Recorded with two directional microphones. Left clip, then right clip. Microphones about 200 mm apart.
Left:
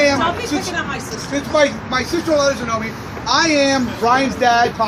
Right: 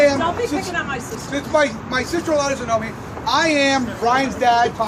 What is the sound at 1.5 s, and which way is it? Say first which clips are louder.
Speech: left 2 dB; 50° left (ahead or behind).